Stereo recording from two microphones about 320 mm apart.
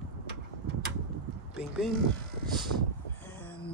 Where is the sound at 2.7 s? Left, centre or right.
Right.